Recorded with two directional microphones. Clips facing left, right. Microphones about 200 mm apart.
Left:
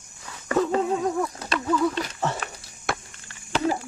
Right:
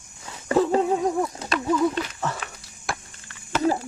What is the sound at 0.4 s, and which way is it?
Dog, 30° right (ahead or behind).